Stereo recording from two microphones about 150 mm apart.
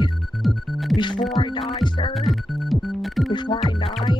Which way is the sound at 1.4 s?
35° left (ahead or behind).